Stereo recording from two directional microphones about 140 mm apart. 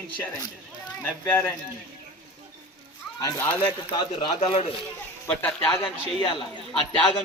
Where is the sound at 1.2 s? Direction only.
15° left (ahead or behind).